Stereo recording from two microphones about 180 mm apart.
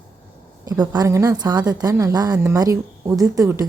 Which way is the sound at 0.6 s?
20° right (ahead or behind).